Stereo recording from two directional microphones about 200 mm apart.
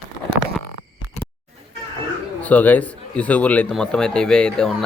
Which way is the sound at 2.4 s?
10° left (ahead or behind).